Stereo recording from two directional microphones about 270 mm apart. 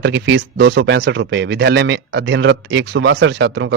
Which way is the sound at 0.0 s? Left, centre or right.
Right.